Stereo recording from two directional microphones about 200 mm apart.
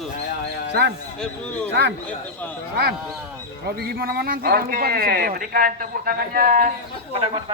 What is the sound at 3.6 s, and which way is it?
A man's voice, 50° right (ahead or behind).